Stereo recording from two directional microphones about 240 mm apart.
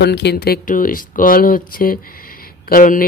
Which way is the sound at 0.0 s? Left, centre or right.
Left.